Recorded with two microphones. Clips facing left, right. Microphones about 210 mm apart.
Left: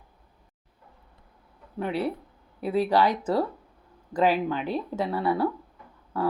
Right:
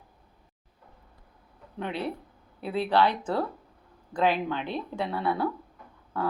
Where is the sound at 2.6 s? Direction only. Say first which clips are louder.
Left 2 dB; 10° left (ahead or behind).